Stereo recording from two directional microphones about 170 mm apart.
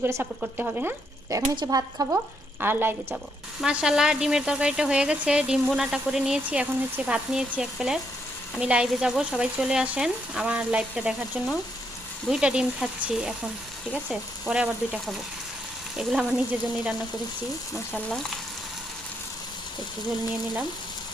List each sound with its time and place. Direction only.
0.0 s speech: 10° right (ahead or behind)
1.5 s speech: 20° right (ahead or behind); by 16.9 s 5° right (ahead or behind)